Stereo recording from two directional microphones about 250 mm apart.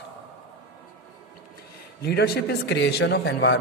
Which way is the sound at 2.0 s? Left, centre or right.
Left.